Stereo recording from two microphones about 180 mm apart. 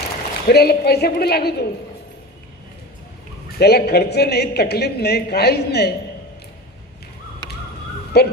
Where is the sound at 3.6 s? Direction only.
65° left (ahead or behind).